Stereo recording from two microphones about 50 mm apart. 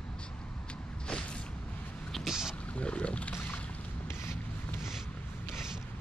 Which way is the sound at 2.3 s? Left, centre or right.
Centre.